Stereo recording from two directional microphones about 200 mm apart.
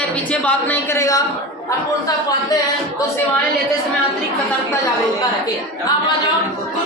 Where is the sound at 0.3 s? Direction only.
10° left (ahead or behind).